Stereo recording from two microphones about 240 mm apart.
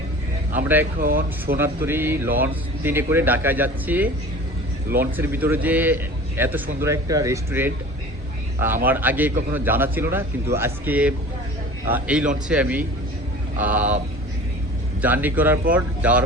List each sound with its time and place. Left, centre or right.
0.5 s speech: centre
0.9 s speech: right
1.5 s speech: centre
8.9 s speech: centre
15.0 s speech: centre